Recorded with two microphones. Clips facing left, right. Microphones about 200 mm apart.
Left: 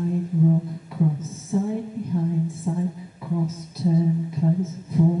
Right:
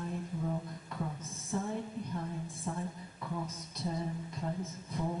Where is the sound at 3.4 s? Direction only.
5° left (ahead or behind).